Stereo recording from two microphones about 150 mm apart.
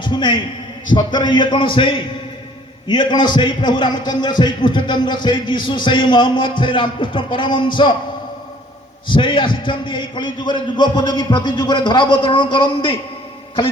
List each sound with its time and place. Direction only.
0.0 s a man's voice: 30° left (ahead or behind)
9.0 s a man's voice: 35° left (ahead or behind)